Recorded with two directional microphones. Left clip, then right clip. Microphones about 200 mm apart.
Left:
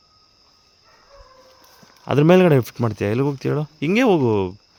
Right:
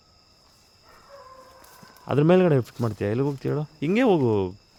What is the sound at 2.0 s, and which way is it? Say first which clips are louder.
Speech: left 5 dB; 30° left (ahead or behind).